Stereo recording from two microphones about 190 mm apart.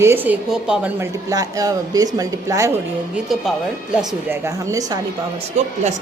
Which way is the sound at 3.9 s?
10° right (ahead or behind).